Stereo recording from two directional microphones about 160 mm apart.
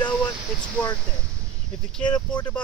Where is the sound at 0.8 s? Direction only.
10° left (ahead or behind).